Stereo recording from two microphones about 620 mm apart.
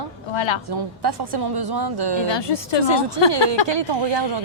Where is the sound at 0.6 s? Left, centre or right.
Right.